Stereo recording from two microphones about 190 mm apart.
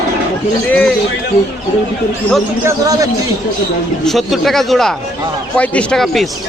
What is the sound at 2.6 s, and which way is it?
Speech, 20° right (ahead or behind).